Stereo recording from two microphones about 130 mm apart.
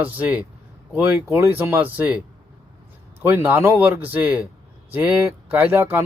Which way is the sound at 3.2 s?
15° right (ahead or behind).